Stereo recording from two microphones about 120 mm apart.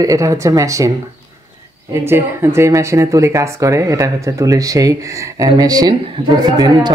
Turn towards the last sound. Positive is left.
turn(degrees=-35)  # may be behind; listen again after turning